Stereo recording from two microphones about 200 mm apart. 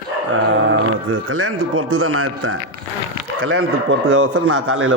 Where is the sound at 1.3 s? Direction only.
90° right.